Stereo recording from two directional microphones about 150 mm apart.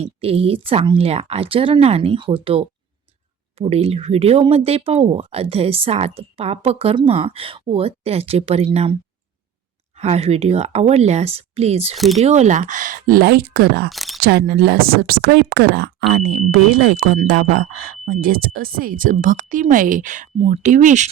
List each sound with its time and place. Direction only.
0.0 s speech: 40° right (ahead or behind)
10.0 s speech: 45° right (ahead or behind)
11.9 s speech: centre (ahead or behind)
12.2 s speech: 50° right (ahead or behind); by 13.9 s 90° right
13.9 s single-lens reflex camera: centre (ahead or behind)
14.2 s speech: 90° right
18.0 s speech: 75° right (ahead or behind); by 21.1 s 55° right (ahead or behind)